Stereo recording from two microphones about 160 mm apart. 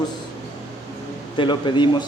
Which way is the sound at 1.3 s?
30° left (ahead or behind).